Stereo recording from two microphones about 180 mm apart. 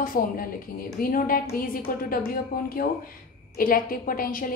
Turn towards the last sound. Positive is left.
turn(degrees=50)  # may be behind; listen again after turning